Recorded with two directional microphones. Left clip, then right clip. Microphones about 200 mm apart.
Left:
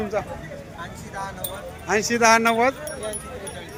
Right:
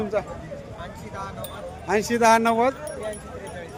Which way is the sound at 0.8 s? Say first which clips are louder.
Left 4 dB; 45° right (ahead or behind).